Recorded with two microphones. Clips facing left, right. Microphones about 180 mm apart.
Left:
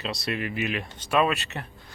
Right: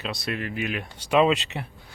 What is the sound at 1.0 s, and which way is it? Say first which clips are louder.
Speech: right 4 dB; 15° right (ahead or behind).